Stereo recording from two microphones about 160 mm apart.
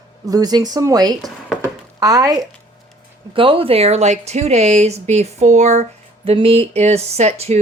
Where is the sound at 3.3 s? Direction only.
35° right (ahead or behind).